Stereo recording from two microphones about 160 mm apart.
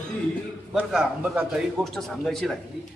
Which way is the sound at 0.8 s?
5° right (ahead or behind).